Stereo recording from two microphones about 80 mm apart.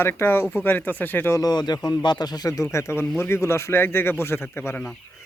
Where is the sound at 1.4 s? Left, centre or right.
Left.